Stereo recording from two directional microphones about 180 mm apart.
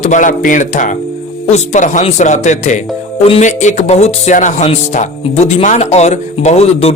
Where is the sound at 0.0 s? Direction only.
45° left (ahead or behind).